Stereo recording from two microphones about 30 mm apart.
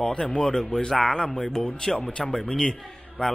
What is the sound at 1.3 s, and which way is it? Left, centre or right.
Speech, centre.